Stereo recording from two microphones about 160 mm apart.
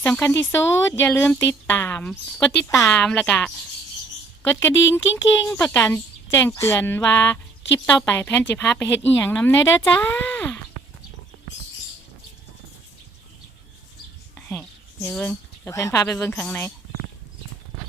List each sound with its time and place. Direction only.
0.0 s speech: 15° left (ahead or behind)
14.3 s whispering: 10° left (ahead or behind)
15.1 s speech: 5° left (ahead or behind)
15.7 s speech: 20° left (ahead or behind)
16.4 s speech: 10° left (ahead or behind)